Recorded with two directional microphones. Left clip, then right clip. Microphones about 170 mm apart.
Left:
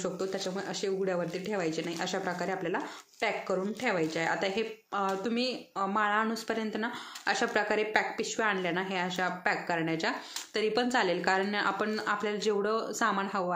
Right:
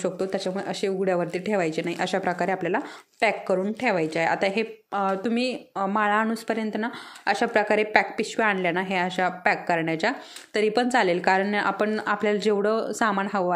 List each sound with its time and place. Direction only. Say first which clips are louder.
0.0 s speech: right 7 dB; 40° right (ahead or behind)